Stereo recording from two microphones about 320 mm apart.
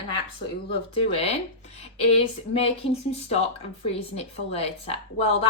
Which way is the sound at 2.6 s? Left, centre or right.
Centre.